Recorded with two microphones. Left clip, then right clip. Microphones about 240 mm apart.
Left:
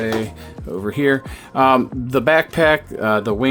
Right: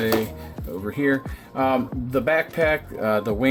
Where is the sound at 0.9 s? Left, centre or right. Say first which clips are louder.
Left 5 dB; left.